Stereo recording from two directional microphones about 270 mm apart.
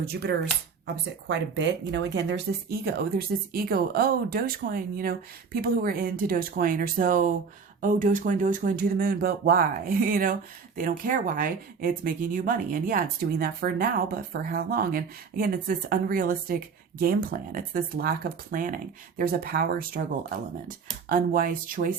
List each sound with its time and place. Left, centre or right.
0.0 s speech: right
21.1 s speech: right